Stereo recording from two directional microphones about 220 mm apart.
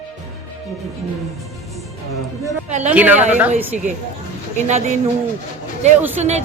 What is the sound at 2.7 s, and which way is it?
Speech, 35° right (ahead or behind).